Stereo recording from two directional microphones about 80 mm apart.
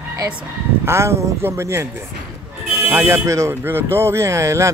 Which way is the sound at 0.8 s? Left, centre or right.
Right.